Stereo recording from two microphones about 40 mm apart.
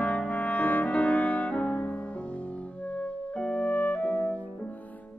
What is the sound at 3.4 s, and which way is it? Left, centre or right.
Music, left.